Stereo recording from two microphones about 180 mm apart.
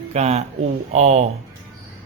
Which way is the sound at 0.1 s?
40° right (ahead or behind).